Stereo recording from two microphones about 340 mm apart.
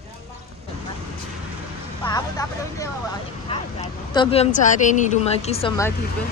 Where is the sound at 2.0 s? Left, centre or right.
Centre.